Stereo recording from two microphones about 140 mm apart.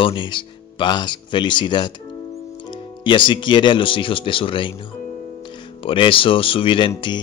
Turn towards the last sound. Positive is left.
turn(degrees=40)  # may be behind; listen again after turning